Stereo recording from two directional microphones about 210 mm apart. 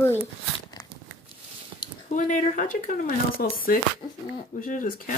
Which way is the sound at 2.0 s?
35° left (ahead or behind).